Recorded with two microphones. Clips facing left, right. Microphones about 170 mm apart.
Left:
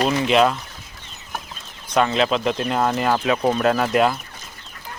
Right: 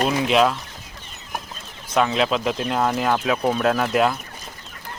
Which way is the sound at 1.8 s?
5° right (ahead or behind).